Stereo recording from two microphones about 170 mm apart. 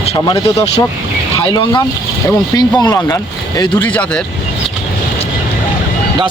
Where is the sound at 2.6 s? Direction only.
25° left (ahead or behind).